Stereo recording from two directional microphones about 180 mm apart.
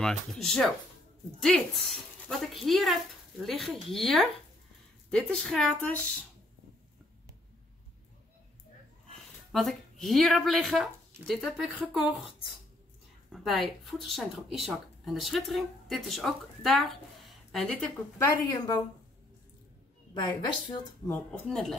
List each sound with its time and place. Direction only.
0.0 s speech: 5° left (ahead or behind)
9.5 s speech: centre (ahead or behind)
18.2 s a woman's voice: 15° left (ahead or behind)
20.2 s a woman's voice: 25° left (ahead or behind)
21.1 s speech: 10° left (ahead or behind)